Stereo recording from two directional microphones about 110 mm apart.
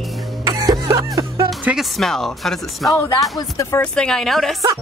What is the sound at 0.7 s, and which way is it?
Music, 35° right (ahead or behind).